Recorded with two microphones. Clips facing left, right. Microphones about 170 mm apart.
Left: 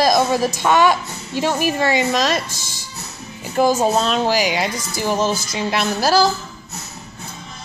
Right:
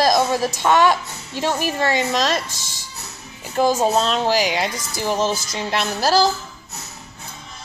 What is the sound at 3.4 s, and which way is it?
Speech, 5° left (ahead or behind).